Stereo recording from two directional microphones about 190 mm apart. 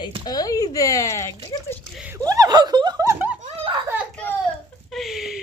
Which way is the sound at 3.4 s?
30° right (ahead or behind).